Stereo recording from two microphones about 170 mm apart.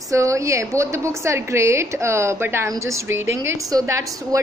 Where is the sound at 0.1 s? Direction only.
20° right (ahead or behind).